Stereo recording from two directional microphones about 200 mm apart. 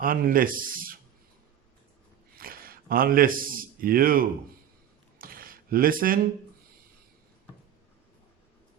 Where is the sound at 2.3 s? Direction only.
45° right (ahead or behind).